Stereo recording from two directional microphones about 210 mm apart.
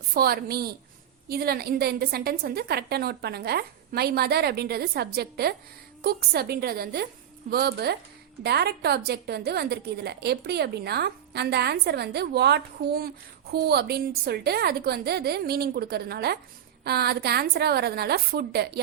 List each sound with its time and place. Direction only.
0.1 s a woman's voice: 45° right (ahead or behind)